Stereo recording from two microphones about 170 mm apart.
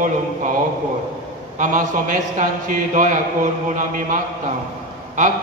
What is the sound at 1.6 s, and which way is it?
A man's voice, 50° right (ahead or behind).